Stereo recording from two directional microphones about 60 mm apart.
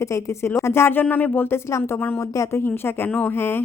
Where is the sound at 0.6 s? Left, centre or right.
Left.